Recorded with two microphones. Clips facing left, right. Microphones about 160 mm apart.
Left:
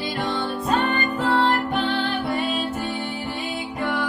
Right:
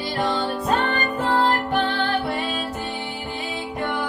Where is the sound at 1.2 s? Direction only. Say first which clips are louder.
Even; 5° right (ahead or behind).